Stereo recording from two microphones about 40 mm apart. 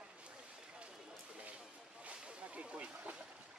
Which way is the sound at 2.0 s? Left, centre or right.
Right.